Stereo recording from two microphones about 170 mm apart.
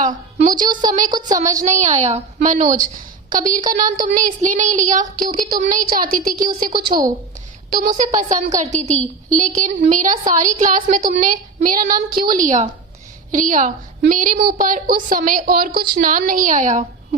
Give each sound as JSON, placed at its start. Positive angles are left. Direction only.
{"t": 0.0, "sound": "a woman's voice", "side_deg": -45}
{"t": 0.5, "sound": "a woman's voice", "side_deg": -25}
{"t": 1.7, "sound": "a woman's voice", "side_deg": -45}
{"t": 6.7, "sound": "a woman's voice", "side_deg": -25}
{"t": 7.8, "sound": "a woman's voice", "side_deg": -50}
{"t": 15.7, "sound": "a woman's voice", "side_deg": -25}
{"t": 16.0, "sound": "a woman's voice", "side_deg": -55}